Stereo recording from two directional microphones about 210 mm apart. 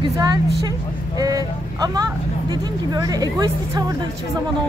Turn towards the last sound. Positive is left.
turn(degrees=-20)  # may be behind; listen again after turning